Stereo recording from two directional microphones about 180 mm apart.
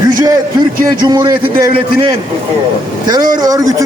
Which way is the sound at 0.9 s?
20° right (ahead or behind).